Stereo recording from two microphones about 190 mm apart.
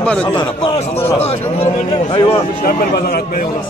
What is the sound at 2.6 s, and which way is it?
Speech, 55° left (ahead or behind).